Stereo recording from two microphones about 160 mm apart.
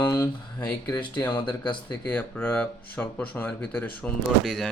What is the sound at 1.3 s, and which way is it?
Speech, 25° left (ahead or behind).